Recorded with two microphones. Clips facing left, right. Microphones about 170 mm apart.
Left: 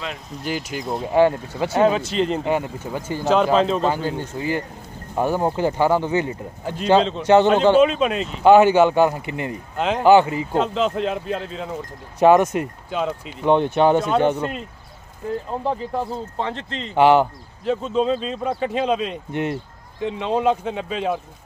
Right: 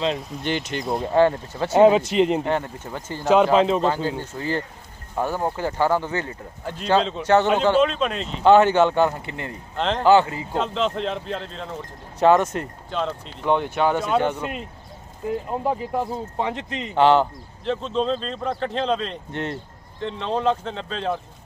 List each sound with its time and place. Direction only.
0.4 s speech: 5° left (ahead or behind)
1.1 s speech: 15° left (ahead or behind)
1.7 s speech: 20° right (ahead or behind)
2.4 s speech: 10° left (ahead or behind)
3.5 s speech: 15° right (ahead or behind)
3.8 s speech: 15° left (ahead or behind)
6.6 s speech: 5° left (ahead or behind)
7.6 s speech: 10° left (ahead or behind)
10.5 s speech: 5° left (ahead or behind)
13.5 s speech: 20° left (ahead or behind)
15.6 s speech: 10° right (ahead or behind)
16.9 s speech: 10° left (ahead or behind)